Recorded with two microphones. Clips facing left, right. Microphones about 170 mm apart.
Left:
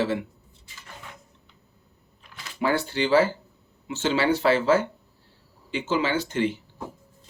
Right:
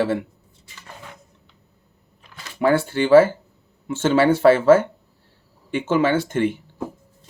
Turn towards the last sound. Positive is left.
turn(degrees=-55)  # may be behind; listen again after turning